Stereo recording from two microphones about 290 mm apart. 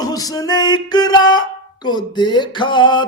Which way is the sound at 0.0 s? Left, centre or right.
Centre.